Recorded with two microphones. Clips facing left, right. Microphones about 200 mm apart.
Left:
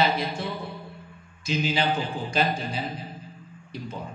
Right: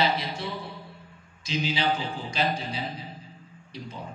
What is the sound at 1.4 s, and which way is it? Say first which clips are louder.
A man's voice: left 2 dB; 50° left (ahead or behind).